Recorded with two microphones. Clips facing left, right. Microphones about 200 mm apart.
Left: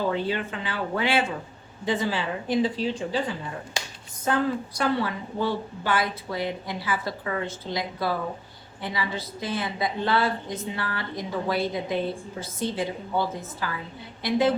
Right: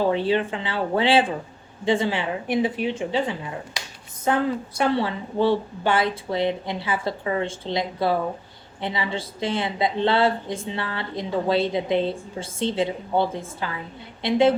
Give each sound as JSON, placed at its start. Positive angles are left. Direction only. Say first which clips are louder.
{"t": 0.0, "sound": "a woman's voice", "louder": "right 5 dB", "side_deg": -25}